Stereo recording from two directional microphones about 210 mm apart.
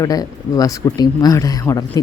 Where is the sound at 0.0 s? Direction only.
15° left (ahead or behind).